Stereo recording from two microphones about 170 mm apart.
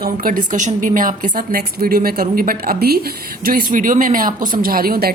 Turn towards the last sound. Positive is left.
turn(degrees=-60)  # may be behind; listen again after turning